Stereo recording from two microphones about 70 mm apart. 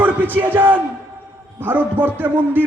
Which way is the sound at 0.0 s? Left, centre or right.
Right.